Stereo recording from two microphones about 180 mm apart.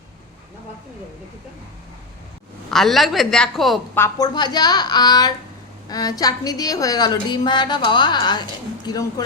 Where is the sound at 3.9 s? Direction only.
15° left (ahead or behind).